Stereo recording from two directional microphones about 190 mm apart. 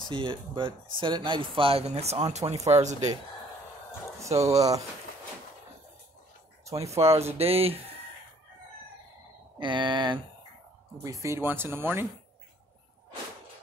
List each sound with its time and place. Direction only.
0.1 s speech: 25° right (ahead or behind)
2.3 s a sound: 35° right (ahead or behind)
4.6 s speech: 20° right (ahead or behind)
6.7 s speech: 15° right (ahead or behind)
7.3 s a sound: 30° right (ahead or behind)
9.6 s speech: 25° right (ahead or behind)